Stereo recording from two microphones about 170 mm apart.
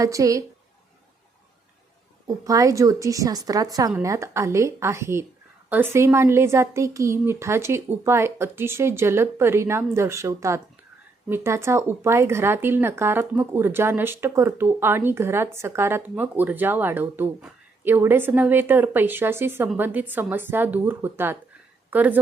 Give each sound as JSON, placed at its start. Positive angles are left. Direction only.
{"t": 0.0, "sound": "a woman's voice", "side_deg": -20}
{"t": 2.2, "sound": "a woman's voice", "side_deg": -20}